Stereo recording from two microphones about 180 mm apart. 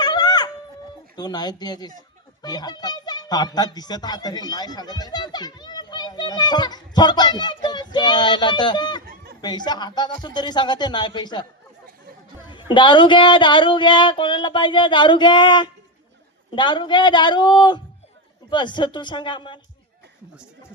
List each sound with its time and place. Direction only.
0.0 s a sound: 20° left (ahead or behind)
1.1 s speech: 20° left (ahead or behind)
12.5 s speech: 25° left (ahead or behind)